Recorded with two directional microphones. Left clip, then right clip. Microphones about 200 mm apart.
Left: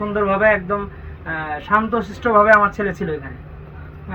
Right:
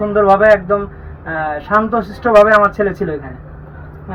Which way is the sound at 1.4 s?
30° left (ahead or behind).